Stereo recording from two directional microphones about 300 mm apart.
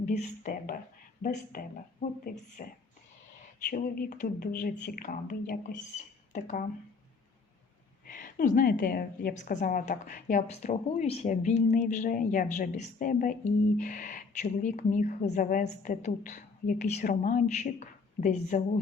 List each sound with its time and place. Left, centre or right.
0.0 s a woman's voice: left
3.7 s a woman's voice: left
8.0 s a woman's voice: left